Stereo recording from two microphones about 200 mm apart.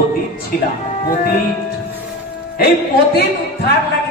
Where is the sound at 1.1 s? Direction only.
45° left (ahead or behind).